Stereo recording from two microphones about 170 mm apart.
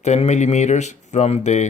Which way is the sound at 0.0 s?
40° left (ahead or behind).